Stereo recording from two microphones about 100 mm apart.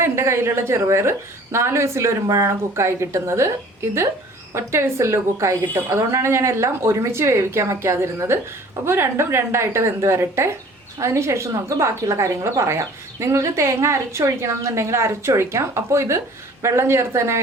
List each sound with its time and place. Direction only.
0.0 s speech: 25° right (ahead or behind)
4.5 s speech: 30° right (ahead or behind)